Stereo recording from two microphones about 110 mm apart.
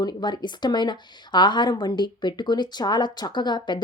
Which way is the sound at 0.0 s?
40° left (ahead or behind).